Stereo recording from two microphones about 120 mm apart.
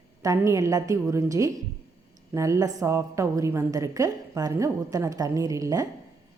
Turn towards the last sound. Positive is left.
turn(degrees=-30)  # may be behind; listen again after turning